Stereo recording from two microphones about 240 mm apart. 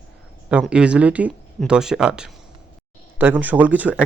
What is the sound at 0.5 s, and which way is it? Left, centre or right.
Speech, centre.